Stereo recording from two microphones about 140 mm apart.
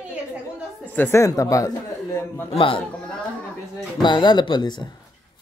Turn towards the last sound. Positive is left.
turn(degrees=30)  # may be behind; listen again after turning